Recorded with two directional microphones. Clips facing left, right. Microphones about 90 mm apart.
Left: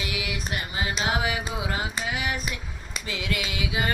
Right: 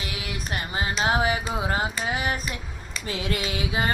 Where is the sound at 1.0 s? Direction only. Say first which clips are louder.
Right 5 dB; 40° right (ahead or behind).